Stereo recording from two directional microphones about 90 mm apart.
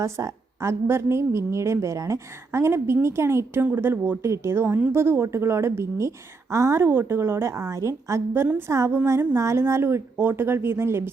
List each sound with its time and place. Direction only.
0.0 s a woman's voice: 35° right (ahead or behind)